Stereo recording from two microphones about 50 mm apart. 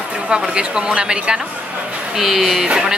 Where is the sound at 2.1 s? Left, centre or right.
Centre.